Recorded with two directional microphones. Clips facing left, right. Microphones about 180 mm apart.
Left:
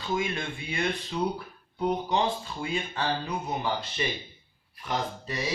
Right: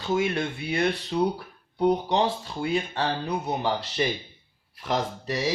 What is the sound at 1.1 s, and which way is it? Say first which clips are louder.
Speech: right 5 dB; 40° right (ahead or behind).